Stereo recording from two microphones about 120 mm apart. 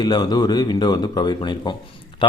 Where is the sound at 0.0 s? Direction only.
35° left (ahead or behind).